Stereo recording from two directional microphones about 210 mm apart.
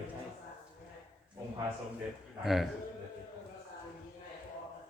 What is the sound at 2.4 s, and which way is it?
Speech, centre (ahead or behind).